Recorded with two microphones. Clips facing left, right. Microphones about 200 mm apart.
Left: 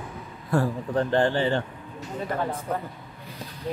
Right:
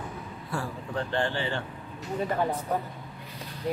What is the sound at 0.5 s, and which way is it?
A man's voice, 40° left (ahead or behind).